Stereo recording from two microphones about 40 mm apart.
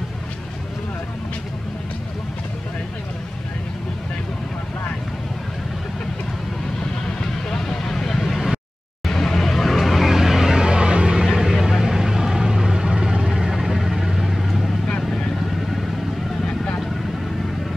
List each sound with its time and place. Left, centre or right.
7.4 s vehicle: centre
9.0 s a sound: centre
10.6 s vehicle: right; by 14.7 s centre
15.0 s vehicle: centre